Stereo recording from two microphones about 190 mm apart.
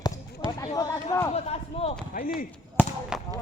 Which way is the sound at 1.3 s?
30° left (ahead or behind).